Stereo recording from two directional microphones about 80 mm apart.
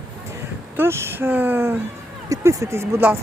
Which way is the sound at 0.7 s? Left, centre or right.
Right.